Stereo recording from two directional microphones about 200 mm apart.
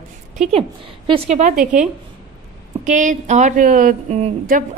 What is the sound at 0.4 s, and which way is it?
A woman's voice, 30° right (ahead or behind).